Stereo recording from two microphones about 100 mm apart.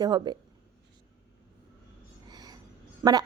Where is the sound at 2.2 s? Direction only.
40° right (ahead or behind).